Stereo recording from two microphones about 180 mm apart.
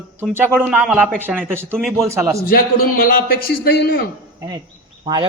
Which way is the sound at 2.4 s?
55° left (ahead or behind).